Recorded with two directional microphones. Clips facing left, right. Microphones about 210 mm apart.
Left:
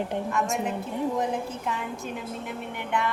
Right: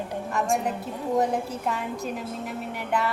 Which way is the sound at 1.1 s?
40° right (ahead or behind).